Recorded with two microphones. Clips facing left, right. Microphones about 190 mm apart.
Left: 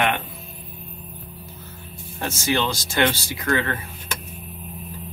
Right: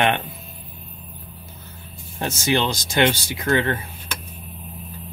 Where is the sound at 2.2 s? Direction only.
20° right (ahead or behind).